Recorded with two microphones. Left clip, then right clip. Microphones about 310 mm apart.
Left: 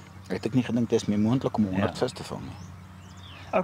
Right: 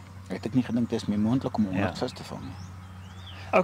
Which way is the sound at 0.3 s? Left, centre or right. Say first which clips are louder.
Left 1 dB; left.